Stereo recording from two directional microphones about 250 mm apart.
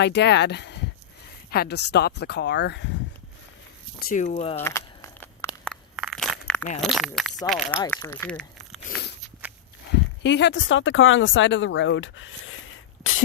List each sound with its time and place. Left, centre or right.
0.0 s speech: left
4.0 s speech: left
4.5 s walk: centre
5.5 s a sound: centre
6.8 s speech: centre
7.8 s speech: centre
8.9 s biting: left
9.4 s dog: centre
10.2 s speech: left